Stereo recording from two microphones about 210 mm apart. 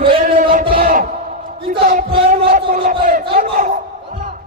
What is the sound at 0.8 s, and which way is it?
Bellow, 40° right (ahead or behind).